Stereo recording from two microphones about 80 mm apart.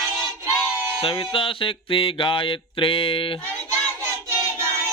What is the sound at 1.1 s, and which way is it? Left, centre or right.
Mantra, left.